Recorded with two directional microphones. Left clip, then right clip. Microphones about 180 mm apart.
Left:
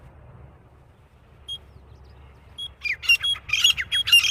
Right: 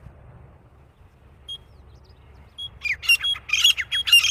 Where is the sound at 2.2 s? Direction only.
85° left.